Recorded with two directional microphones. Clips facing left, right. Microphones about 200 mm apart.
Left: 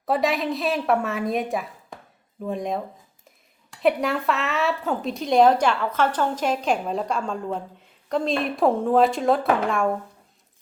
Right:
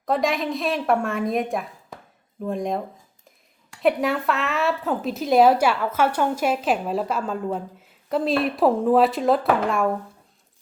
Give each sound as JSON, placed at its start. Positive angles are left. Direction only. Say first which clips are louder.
{"t": 0.0, "sound": "a woman's voice", "louder": "even", "side_deg": 5}